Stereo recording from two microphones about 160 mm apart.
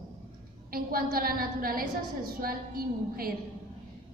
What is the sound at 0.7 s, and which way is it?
A woman's voice, 65° right (ahead or behind).